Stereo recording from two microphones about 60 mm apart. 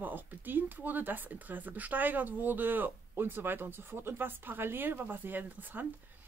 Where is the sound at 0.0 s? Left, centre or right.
Right.